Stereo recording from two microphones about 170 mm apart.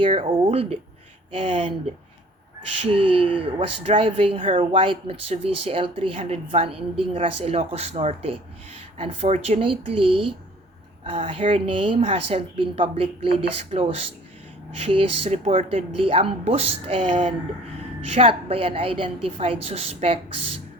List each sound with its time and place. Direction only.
0.0 s speech: 35° right (ahead or behind)
2.7 s speech: 35° right (ahead or behind)